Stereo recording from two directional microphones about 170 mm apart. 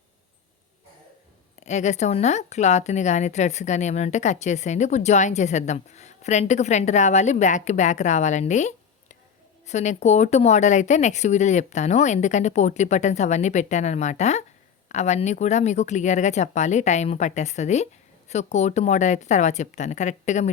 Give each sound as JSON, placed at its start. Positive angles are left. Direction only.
{"t": 1.6, "sound": "a woman's voice", "side_deg": 45}